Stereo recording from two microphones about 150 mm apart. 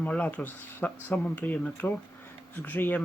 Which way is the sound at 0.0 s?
10° left (ahead or behind).